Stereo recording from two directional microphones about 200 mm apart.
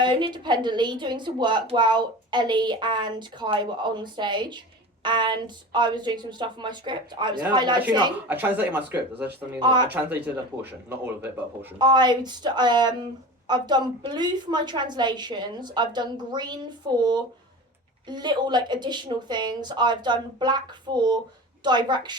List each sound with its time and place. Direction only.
0.0 s speech: 25° right (ahead or behind)
8.3 s speech: 10° right (ahead or behind)
9.6 s speech: 20° right (ahead or behind)
10.2 s speech: 10° right (ahead or behind)
11.8 s speech: 20° right (ahead or behind)